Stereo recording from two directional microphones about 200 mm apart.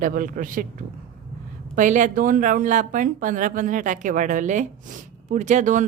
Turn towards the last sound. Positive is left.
turn(degrees=-40)  # may be behind; listen again after turning